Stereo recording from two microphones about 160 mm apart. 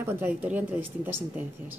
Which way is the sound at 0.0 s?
15° right (ahead or behind).